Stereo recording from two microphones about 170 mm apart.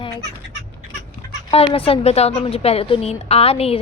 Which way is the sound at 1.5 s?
35° left (ahead or behind).